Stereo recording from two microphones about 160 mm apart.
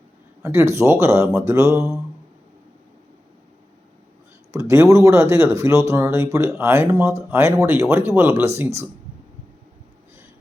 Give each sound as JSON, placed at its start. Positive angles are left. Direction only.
{"t": 0.4, "sound": "speech", "side_deg": -15}
{"t": 4.5, "sound": "speech", "side_deg": -20}